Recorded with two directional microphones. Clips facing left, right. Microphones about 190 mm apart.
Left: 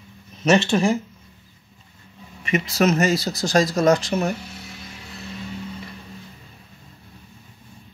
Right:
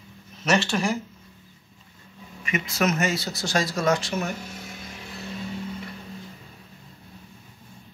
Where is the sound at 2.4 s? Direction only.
35° left (ahead or behind).